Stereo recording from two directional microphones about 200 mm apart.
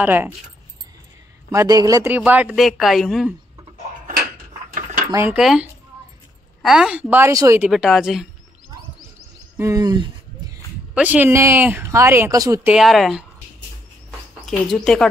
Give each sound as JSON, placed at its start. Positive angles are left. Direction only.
{"t": 0.0, "sound": "speech", "side_deg": -10}
{"t": 1.5, "sound": "speech", "side_deg": -15}
{"t": 5.1, "sound": "speech", "side_deg": -10}
{"t": 7.7, "sound": "speech", "side_deg": 0}
{"t": 9.6, "sound": "a sound", "side_deg": -15}
{"t": 11.0, "sound": "speech", "side_deg": -10}
{"t": 12.7, "sound": "speech", "side_deg": 0}
{"t": 14.4, "sound": "speech", "side_deg": 0}